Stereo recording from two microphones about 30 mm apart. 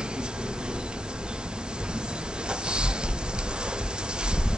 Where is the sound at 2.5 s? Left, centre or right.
Right.